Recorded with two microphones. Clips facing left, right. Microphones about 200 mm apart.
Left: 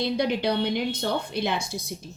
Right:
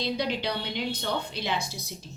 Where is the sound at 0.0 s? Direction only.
55° left (ahead or behind).